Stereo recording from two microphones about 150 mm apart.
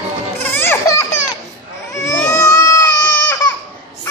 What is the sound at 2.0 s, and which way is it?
Baby cry, 20° left (ahead or behind).